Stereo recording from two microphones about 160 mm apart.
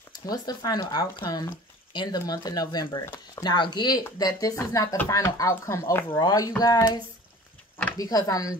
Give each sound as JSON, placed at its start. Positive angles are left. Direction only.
{"t": 0.3, "sound": "speech", "side_deg": 25}
{"t": 8.0, "sound": "speech", "side_deg": 20}